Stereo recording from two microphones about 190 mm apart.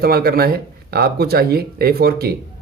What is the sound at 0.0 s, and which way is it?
Speech, 55° right (ahead or behind).